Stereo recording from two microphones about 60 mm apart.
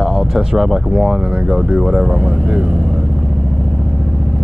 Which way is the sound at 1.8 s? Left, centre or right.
Centre.